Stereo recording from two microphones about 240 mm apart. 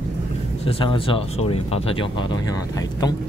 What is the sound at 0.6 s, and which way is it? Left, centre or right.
Speech, left.